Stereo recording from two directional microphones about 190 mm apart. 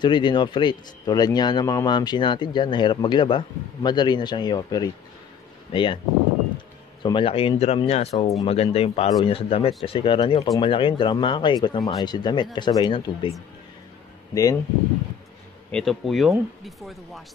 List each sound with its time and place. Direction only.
0.0 s speech: 25° left (ahead or behind)
7.0 s speech: 25° left (ahead or behind)
14.3 s speech: 20° left (ahead or behind)
15.7 s speech: centre (ahead or behind)